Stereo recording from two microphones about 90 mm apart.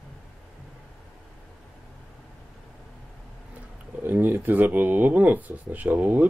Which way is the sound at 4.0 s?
20° right (ahead or behind).